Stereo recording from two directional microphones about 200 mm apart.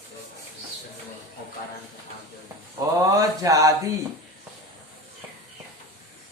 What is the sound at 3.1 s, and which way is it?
Speech, 15° right (ahead or behind).